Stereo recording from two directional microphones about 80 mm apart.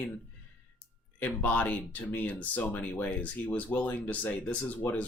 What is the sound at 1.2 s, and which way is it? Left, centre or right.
Speech, left.